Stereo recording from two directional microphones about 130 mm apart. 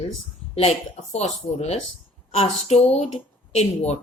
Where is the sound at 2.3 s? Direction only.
55° left (ahead or behind).